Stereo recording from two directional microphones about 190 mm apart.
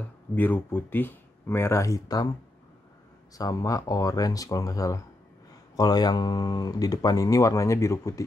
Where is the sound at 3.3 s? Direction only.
20° left (ahead or behind).